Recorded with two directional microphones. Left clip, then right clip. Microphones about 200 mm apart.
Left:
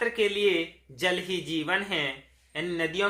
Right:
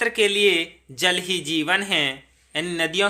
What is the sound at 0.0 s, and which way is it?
A man's voice, 55° right (ahead or behind).